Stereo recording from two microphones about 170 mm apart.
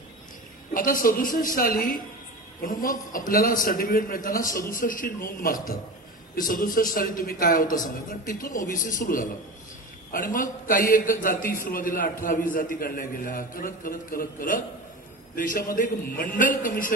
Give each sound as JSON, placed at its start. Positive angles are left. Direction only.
{"t": 0.7, "sound": "a man's voice", "side_deg": 55}